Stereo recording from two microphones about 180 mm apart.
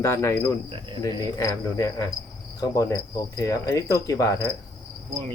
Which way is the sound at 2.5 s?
20° left (ahead or behind).